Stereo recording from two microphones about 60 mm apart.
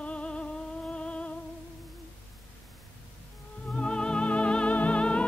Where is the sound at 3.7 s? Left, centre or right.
Centre.